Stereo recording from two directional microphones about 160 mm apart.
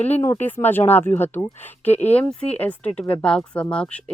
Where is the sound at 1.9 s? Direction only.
40° left (ahead or behind).